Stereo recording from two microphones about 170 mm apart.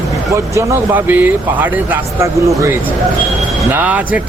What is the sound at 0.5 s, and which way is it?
Speech, 15° right (ahead or behind).